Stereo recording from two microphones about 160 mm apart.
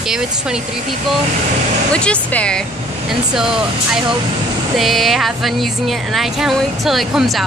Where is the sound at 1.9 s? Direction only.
5° left (ahead or behind).